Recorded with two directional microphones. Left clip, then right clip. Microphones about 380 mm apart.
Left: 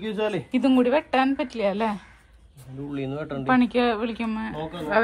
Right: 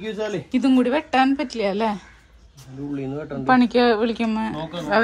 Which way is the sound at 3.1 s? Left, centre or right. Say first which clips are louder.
Right 1 dB; left.